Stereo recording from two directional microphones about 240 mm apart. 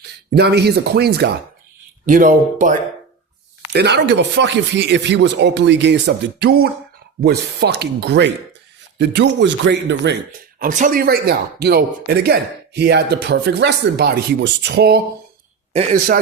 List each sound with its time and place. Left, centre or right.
0.3 s speech: right
2.0 s speech: right
3.7 s speech: right
10.6 s speech: right
15.7 s speech: right